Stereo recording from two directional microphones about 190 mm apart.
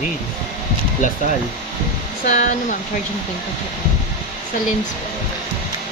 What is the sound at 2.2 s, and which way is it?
Speech, 40° left (ahead or behind).